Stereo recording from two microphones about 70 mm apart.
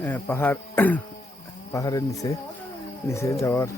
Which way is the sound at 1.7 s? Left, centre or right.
Left.